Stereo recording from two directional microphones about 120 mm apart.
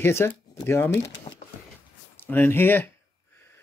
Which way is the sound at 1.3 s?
45° left (ahead or behind).